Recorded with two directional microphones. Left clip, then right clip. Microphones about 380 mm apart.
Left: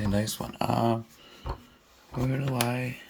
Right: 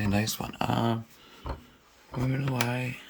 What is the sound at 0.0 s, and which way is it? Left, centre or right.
Speech, centre.